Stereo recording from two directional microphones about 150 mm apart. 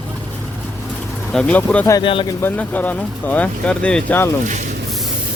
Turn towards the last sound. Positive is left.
turn(degrees=10)  # may be behind; listen again after turning